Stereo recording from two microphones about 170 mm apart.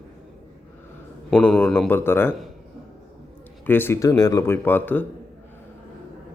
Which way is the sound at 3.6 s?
10° left (ahead or behind).